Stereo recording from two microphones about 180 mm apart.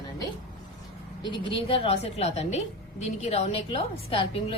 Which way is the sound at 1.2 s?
25° left (ahead or behind).